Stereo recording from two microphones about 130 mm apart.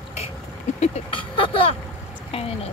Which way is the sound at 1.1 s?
40° left (ahead or behind).